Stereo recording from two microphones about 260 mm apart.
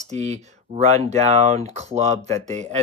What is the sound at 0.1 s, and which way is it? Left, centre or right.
Speech, right.